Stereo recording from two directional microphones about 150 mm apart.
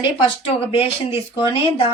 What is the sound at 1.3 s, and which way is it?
Speech, 35° left (ahead or behind).